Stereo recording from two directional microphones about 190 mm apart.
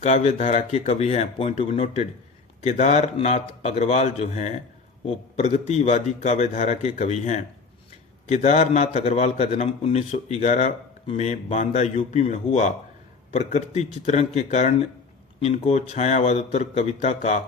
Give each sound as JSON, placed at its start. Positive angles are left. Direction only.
{"t": 0.0, "sound": "a man's voice", "side_deg": 35}